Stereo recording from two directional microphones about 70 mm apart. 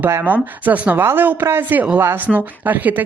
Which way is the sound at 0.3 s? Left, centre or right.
Right.